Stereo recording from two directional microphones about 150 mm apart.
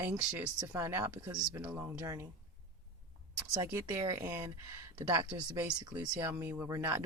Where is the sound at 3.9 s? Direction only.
30° right (ahead or behind).